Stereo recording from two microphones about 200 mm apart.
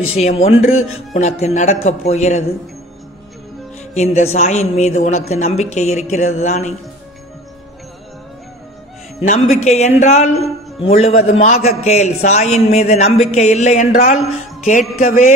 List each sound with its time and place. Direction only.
0.1 s a man's voice: 30° left (ahead or behind)
0.5 s speech: 90° left
1.1 s a man's voice: 35° left (ahead or behind)
3.9 s a man's voice: 30° left (ahead or behind)
9.7 s a man's voice: 35° left (ahead or behind)